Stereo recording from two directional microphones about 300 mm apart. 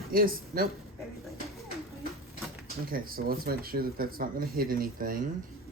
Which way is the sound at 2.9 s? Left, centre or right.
Right.